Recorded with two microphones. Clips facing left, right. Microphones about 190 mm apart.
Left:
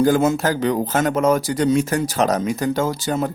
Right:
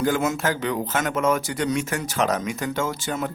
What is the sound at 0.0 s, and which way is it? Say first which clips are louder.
Speech: left 6 dB; 35° left (ahead or behind).